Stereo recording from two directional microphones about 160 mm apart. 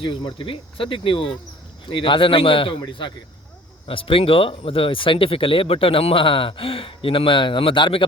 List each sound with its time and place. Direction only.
0.0 s speech: 30° left (ahead or behind)